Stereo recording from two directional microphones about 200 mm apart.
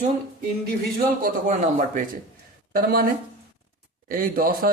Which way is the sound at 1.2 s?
40° right (ahead or behind).